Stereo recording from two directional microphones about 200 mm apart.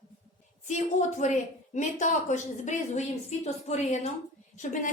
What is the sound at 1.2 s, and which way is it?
A woman's voice, 35° left (ahead or behind).